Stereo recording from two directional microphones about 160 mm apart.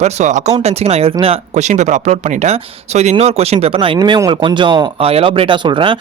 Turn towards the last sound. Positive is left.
turn(degrees=-30)  # may be behind; listen again after turning